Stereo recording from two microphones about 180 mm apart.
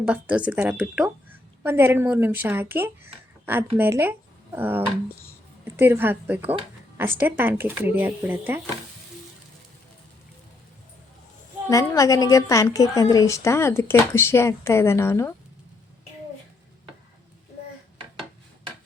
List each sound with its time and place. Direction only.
0.0 s a woman's voice: 5° right (ahead or behind)
11.7 s a woman's voice: 20° left (ahead or behind)